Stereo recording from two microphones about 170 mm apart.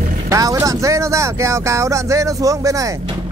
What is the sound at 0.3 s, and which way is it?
Speech, 20° right (ahead or behind).